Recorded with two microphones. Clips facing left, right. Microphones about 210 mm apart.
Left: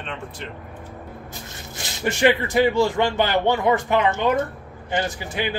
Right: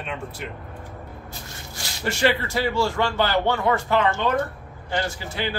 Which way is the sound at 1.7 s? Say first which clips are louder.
Left 3 dB; 20° left (ahead or behind).